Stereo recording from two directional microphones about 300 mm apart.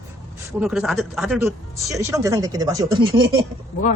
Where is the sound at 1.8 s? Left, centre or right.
Centre.